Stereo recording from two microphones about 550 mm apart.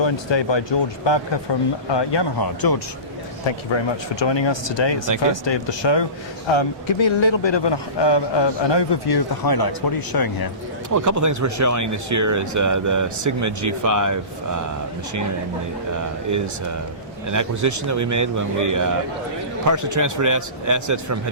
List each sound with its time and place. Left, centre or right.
0.0 s a man's voice: left
3.4 s a man's voice: left
10.8 s speech: right
17.2 s speech: right